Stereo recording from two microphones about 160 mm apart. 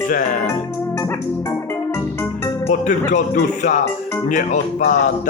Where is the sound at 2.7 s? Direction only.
55° left (ahead or behind).